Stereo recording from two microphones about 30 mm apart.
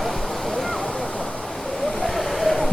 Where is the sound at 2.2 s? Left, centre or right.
Centre.